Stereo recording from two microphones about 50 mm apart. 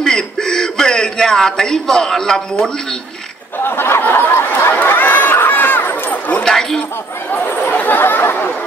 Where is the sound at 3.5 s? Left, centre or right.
Left.